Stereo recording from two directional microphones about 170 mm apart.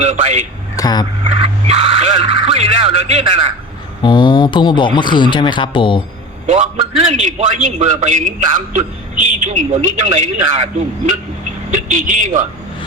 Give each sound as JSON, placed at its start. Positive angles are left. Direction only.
{"t": 0.0, "sound": "a man's voice", "side_deg": -45}
{"t": 0.8, "sound": "speech", "side_deg": 25}
{"t": 1.2, "sound": "a man's voice", "side_deg": -35}
{"t": 4.0, "sound": "speech", "side_deg": 25}
{"t": 6.5, "sound": "a man's voice", "side_deg": -45}
{"t": 11.7, "sound": "a man's voice", "side_deg": -50}